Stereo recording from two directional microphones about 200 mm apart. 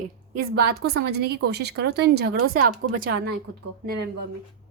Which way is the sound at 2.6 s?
45° right (ahead or behind).